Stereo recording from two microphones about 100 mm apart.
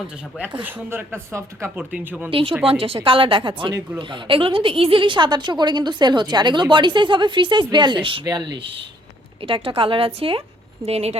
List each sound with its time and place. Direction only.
0.3 s speech: 15° right (ahead or behind)
2.3 s a woman's voice: 60° right (ahead or behind)
10.8 s speech: 90° right